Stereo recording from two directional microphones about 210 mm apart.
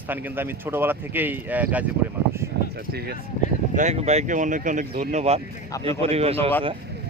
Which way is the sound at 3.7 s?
35° right (ahead or behind).